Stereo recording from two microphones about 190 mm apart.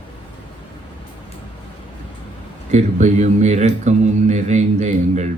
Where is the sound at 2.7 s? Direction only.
40° right (ahead or behind).